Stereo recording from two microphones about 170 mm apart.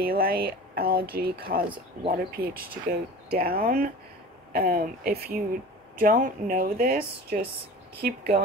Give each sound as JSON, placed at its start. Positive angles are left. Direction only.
{"t": 0.0, "sound": "speech", "side_deg": -65}